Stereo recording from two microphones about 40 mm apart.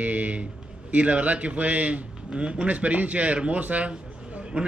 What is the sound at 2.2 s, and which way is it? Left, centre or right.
A man's voice, right.